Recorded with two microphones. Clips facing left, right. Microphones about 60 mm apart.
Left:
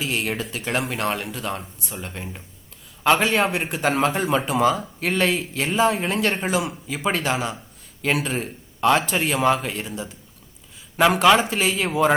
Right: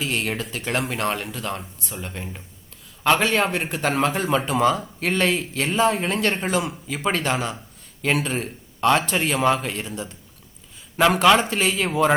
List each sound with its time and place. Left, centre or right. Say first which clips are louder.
0.0 s a man's voice: even; centre